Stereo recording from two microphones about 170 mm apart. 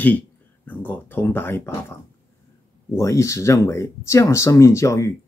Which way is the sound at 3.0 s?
20° left (ahead or behind).